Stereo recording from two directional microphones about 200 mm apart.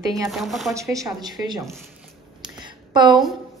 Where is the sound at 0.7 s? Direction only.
15° right (ahead or behind).